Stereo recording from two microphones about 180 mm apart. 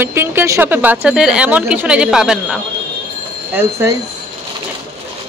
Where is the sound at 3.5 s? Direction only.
15° right (ahead or behind).